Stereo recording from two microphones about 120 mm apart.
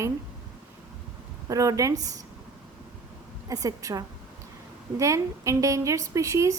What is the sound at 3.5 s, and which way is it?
A woman's voice, 30° right (ahead or behind).